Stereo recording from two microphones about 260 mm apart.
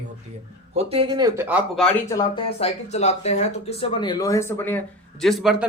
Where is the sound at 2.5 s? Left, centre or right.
Left.